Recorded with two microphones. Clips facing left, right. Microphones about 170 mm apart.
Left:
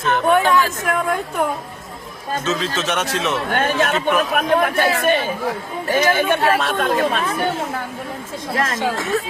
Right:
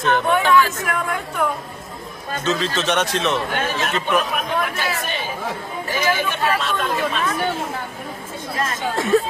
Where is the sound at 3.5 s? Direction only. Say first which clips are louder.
Left 4 dB; 55° left (ahead or behind).